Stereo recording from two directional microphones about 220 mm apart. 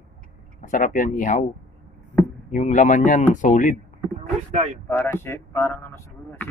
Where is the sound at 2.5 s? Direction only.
35° left (ahead or behind).